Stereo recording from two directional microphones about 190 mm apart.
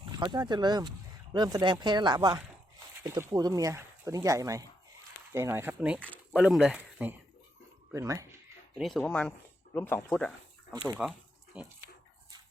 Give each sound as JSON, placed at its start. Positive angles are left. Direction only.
{"t": 0.0, "sound": "speech", "side_deg": -20}
{"t": 8.8, "sound": "speech", "side_deg": 5}